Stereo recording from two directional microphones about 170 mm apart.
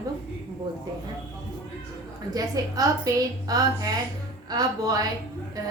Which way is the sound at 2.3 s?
20° right (ahead or behind).